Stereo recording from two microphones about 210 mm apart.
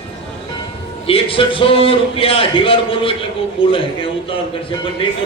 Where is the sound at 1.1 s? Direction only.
25° left (ahead or behind).